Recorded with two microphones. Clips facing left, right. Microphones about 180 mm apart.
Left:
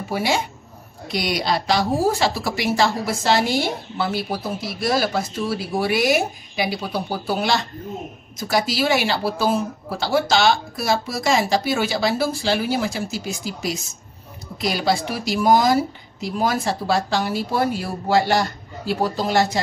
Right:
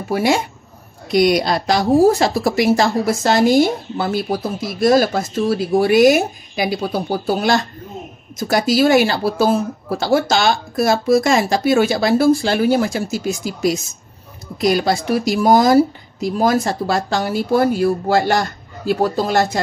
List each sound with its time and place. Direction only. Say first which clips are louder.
0.1 s speech: right 6 dB; 50° right (ahead or behind)